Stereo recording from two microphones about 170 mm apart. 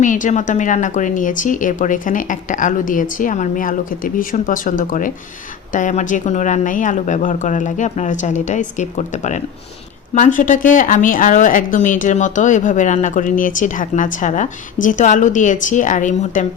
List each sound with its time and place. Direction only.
0.0 s a woman's voice: 50° left (ahead or behind)